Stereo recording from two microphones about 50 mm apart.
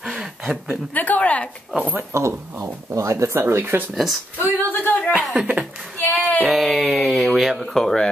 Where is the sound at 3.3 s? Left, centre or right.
Right.